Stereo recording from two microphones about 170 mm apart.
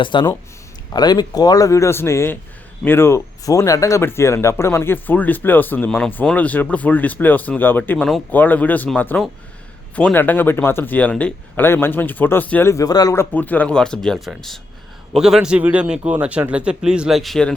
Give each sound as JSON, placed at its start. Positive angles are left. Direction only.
{"t": 0.0, "sound": "speech", "side_deg": 30}
{"t": 13.3, "sound": "a man's voice", "side_deg": 10}